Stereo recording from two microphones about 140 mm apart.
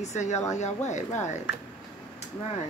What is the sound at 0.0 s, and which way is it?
Speech, 55° left (ahead or behind).